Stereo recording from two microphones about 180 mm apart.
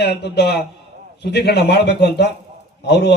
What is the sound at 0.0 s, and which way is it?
A man's voice, 65° left (ahead or behind).